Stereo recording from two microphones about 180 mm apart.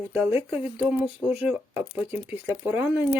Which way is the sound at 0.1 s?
10° right (ahead or behind).